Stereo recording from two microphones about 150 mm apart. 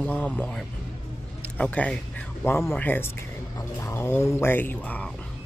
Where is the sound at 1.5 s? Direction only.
10° left (ahead or behind).